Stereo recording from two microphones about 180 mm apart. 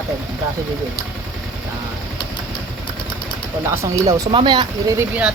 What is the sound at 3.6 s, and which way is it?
Speech, 15° right (ahead or behind).